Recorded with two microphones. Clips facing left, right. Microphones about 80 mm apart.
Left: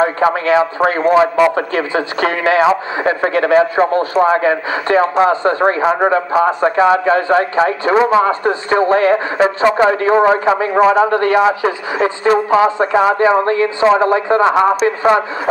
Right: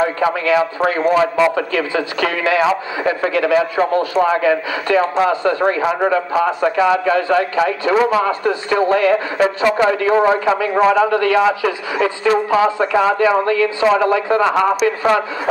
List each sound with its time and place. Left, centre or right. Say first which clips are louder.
0.0 s a man's voice: left 3 dB; left
1.1 s speech: left 4 dB; left
1.5 s a man's voice: left 2 dB; left
14.5 s speech: left 3 dB; centre